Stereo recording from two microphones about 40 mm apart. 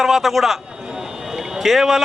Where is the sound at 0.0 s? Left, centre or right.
Centre.